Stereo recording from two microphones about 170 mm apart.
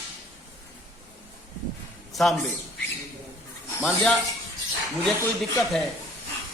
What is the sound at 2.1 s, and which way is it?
Speech, centre (ahead or behind).